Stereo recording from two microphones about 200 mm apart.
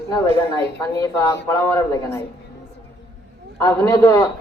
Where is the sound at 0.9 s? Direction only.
15° left (ahead or behind).